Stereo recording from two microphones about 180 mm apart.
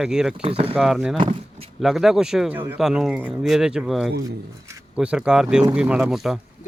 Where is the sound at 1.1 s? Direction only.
25° right (ahead or behind).